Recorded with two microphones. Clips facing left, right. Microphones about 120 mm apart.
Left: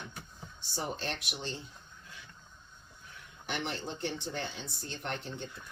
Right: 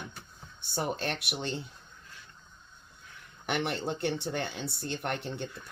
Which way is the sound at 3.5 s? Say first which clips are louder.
Right 6 dB; 65° right (ahead or behind).